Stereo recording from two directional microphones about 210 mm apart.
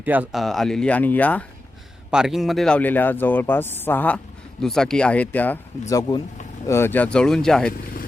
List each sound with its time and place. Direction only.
0.0 s speech: 10° right (ahead or behind); by 5.5 s 5° left (ahead or behind)
5.9 s speech: 20° left (ahead or behind); by 7.7 s 5° left (ahead or behind)